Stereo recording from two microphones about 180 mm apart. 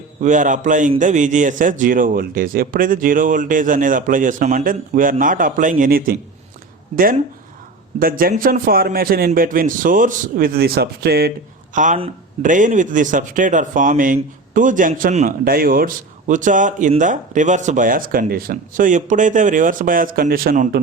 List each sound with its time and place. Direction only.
0.2 s speech: 45° right (ahead or behind); by 11.3 s 60° right (ahead or behind)
11.7 s speech: 45° right (ahead or behind)